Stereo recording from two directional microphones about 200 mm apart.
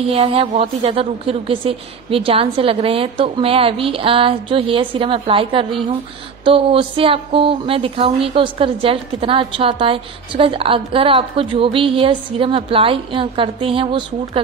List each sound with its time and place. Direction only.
0.1 s speech: 30° right (ahead or behind)